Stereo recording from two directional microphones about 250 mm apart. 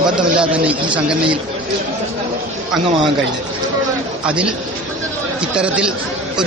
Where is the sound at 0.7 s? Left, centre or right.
Centre.